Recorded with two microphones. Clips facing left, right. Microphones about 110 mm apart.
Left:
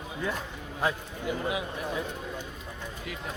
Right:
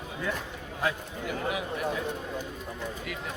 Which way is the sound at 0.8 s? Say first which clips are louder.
Left 1 dB; 25° left (ahead or behind).